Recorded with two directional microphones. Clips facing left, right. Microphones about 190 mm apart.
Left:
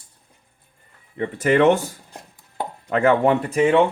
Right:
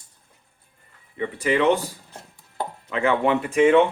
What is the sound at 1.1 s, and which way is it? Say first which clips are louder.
Speech: left 4 dB; 50° left (ahead or behind).